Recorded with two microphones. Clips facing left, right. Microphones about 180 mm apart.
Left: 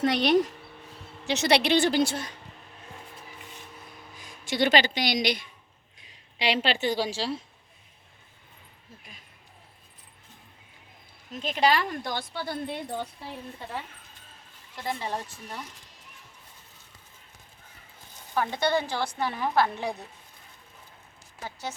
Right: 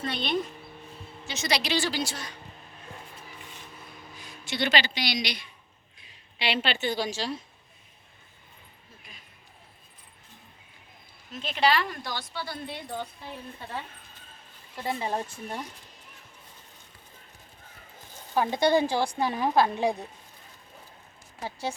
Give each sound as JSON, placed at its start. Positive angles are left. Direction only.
{"t": 0.0, "sound": "speech", "side_deg": 80}
{"t": 1.2, "sound": "a woman's voice", "side_deg": 70}
{"t": 4.2, "sound": "speech", "side_deg": 45}
{"t": 6.4, "sound": "a woman's voice", "side_deg": 35}
{"t": 11.3, "sound": "speech", "side_deg": 40}
{"t": 14.8, "sound": "speech", "side_deg": -15}
{"t": 18.3, "sound": "speech", "side_deg": -15}
{"t": 21.4, "sound": "speech", "side_deg": -30}